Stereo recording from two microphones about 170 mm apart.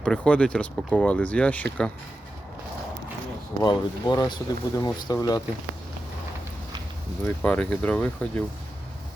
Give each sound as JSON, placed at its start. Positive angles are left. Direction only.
{"t": 0.0, "sound": "speech", "side_deg": 5}
{"t": 3.6, "sound": "speech", "side_deg": 25}
{"t": 7.3, "sound": "speech", "side_deg": 10}